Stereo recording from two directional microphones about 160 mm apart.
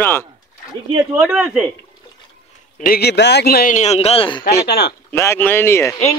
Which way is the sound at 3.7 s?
45° left (ahead or behind).